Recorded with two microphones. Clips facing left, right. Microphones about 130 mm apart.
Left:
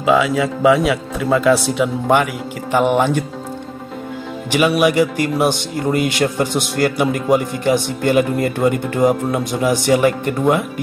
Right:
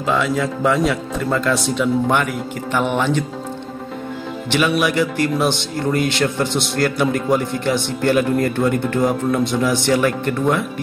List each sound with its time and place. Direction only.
0.0 s speech: 5° left (ahead or behind)
2.8 s speech: 50° left (ahead or behind)
4.5 s speech: 10° left (ahead or behind)